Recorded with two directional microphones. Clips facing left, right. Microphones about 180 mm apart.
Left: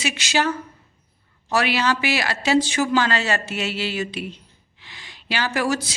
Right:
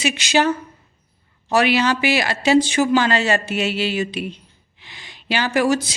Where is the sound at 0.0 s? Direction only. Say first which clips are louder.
Right 4 dB; 20° right (ahead or behind).